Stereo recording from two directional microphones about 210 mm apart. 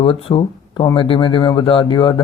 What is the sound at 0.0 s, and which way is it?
Speech, 25° left (ahead or behind).